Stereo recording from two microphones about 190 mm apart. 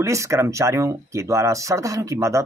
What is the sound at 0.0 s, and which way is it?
A man's voice, 15° right (ahead or behind).